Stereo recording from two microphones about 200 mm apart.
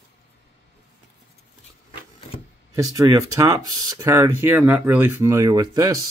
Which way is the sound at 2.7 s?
15° right (ahead or behind).